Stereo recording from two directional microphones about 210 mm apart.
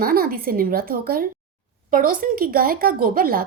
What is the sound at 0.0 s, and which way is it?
A woman's voice, 45° right (ahead or behind).